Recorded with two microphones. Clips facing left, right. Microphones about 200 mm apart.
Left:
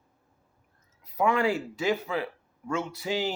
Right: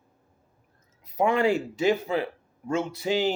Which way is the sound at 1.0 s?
25° right (ahead or behind).